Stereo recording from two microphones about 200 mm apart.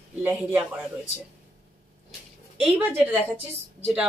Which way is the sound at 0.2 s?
10° right (ahead or behind).